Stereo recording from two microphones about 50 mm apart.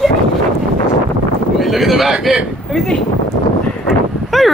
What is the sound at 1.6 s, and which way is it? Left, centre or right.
Speech, centre.